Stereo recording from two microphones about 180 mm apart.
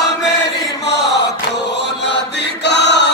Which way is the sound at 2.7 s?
70° left (ahead or behind).